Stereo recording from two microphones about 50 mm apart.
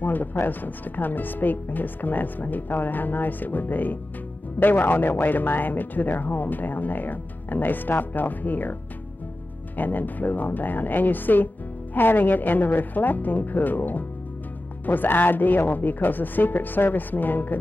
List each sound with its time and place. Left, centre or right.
0.0 s a man's voice: left
9.8 s a man's voice: left